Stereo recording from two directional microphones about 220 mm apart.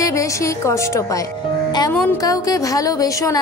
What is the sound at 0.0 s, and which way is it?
A woman's voice, 15° left (ahead or behind).